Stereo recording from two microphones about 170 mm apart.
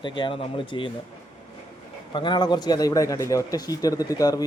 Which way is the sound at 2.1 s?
25° left (ahead or behind).